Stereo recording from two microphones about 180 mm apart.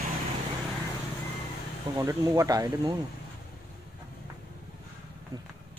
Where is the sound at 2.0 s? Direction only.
15° right (ahead or behind).